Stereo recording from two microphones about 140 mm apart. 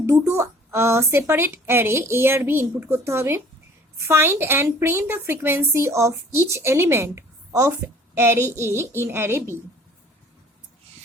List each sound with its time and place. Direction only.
0.0 s a woman's voice: 20° right (ahead or behind)